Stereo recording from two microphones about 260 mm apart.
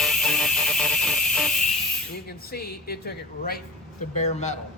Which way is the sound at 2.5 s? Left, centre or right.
Left.